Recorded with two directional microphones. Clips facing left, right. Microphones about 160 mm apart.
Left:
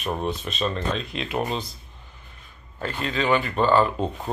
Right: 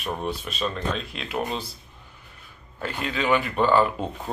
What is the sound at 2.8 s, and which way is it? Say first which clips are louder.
Speech: left 1 dB; 10° right (ahead or behind).